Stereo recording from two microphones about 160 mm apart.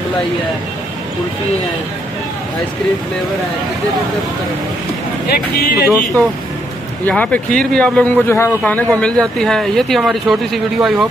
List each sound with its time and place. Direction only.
5.3 s speech: 80° left
7.1 s a man's voice: 10° left (ahead or behind)